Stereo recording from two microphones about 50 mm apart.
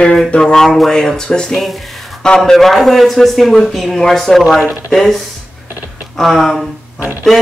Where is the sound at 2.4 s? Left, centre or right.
Centre.